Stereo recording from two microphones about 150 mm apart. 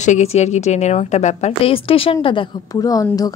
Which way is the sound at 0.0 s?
50° left (ahead or behind).